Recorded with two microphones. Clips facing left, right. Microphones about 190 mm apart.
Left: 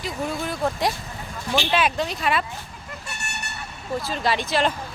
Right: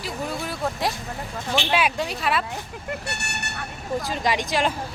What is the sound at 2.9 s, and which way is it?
Vehicle, 70° right (ahead or behind).